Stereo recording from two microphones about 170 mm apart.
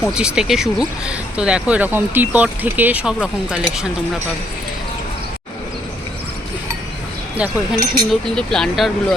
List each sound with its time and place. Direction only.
0.1 s speech: 5° right (ahead or behind)
7.3 s speech: 5° right (ahead or behind)
8.1 s speech: 5° left (ahead or behind)